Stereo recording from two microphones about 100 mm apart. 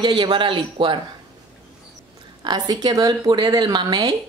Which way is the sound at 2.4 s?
45° right (ahead or behind).